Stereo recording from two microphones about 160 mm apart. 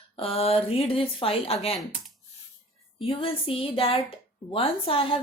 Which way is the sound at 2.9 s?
35° left (ahead or behind).